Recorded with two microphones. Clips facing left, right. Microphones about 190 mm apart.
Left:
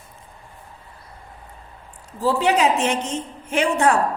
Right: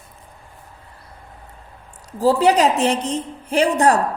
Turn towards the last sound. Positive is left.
turn(degrees=-35)  # may be behind; listen again after turning